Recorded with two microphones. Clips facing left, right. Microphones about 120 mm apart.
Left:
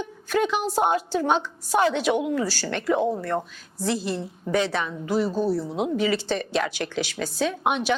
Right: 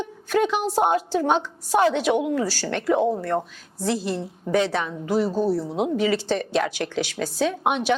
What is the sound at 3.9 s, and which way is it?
A woman's voice, 55° right (ahead or behind).